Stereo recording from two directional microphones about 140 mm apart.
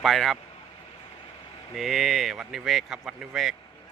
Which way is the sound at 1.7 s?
Centre (ahead or behind).